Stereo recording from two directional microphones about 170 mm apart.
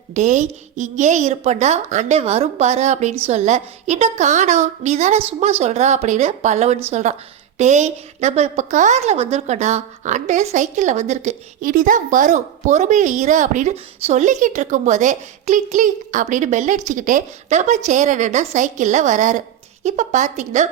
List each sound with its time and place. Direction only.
0.1 s a woman's voice: 45° right (ahead or behind)